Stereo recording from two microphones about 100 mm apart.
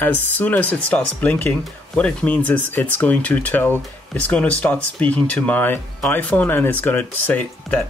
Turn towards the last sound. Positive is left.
turn(degrees=15)  # may be behind; listen again after turning